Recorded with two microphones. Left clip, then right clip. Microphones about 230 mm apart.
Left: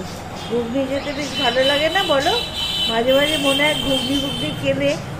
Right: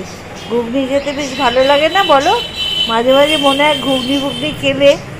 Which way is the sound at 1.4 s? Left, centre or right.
Right.